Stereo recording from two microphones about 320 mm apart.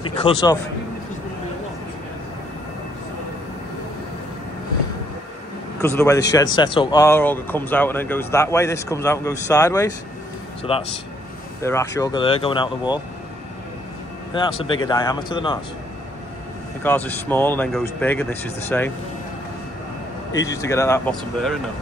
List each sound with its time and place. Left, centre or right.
0.0 s speech: centre
5.8 s speech: centre
14.6 s speech: centre
16.8 s speech: centre
20.3 s speech: centre